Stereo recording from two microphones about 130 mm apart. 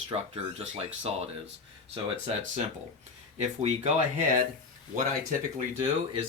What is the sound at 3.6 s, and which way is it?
Speech, 75° right (ahead or behind).